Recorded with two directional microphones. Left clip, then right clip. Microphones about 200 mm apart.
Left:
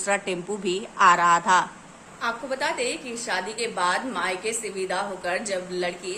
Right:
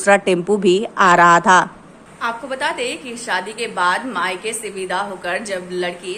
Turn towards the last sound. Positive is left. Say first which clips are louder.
# right 5 dB
turn(degrees=5)  # may be behind; listen again after turning